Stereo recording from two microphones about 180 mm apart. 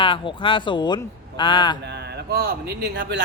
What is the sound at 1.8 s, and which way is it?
Speech, 70° right (ahead or behind).